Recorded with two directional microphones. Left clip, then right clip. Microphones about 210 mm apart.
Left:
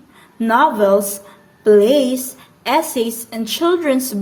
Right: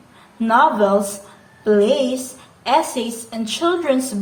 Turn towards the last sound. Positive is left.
turn(degrees=45)  # may be behind; listen again after turning